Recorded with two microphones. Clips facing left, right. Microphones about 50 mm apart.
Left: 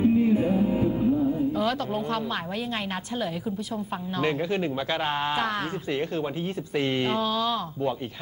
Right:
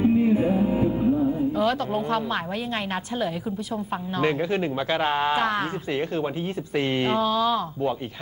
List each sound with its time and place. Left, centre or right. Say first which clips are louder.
0.0 s music: right 1 dB; centre
1.5 s speech: right 3 dB; centre